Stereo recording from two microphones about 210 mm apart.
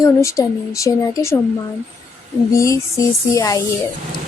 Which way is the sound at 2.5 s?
15° left (ahead or behind).